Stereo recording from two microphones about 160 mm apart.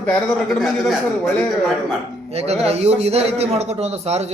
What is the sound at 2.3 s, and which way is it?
A man's voice, 40° right (ahead or behind).